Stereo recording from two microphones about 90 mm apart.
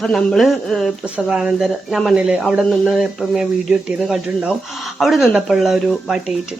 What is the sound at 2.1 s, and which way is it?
Speech, 15° right (ahead or behind).